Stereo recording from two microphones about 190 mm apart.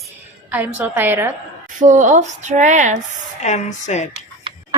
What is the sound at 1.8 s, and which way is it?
Speech, 40° right (ahead or behind).